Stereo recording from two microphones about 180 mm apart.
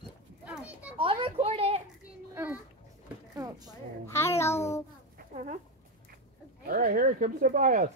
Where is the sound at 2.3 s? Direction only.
10° right (ahead or behind).